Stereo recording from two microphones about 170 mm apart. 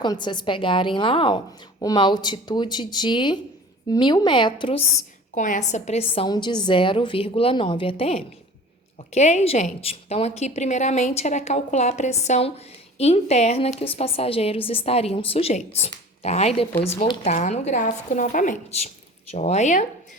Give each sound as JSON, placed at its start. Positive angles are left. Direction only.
{"t": 0.0, "sound": "speech", "side_deg": 25}
{"t": 5.3, "sound": "a woman's voice", "side_deg": 45}